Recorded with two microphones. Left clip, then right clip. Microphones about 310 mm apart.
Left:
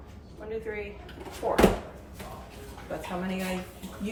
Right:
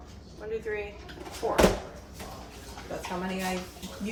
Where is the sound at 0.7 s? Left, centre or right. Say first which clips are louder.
Right 3 dB; centre.